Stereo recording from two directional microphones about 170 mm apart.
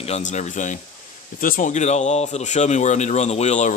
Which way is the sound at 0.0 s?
40° left (ahead or behind).